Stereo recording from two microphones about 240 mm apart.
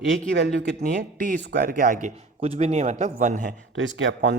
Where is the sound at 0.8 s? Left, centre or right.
Right.